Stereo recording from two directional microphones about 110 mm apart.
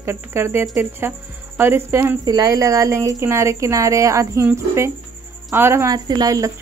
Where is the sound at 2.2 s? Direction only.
35° right (ahead or behind).